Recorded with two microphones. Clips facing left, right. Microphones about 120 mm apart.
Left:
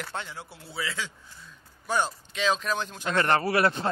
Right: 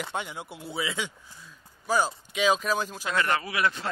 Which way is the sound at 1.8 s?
5° right (ahead or behind).